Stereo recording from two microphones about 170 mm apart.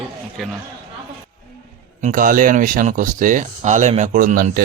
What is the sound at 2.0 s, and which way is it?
Speech, 50° right (ahead or behind).